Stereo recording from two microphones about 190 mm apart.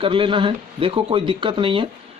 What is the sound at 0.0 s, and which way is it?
Speech, 25° right (ahead or behind).